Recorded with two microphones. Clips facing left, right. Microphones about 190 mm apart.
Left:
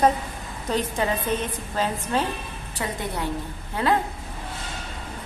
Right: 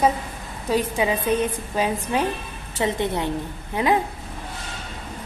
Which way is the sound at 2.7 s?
25° right (ahead or behind).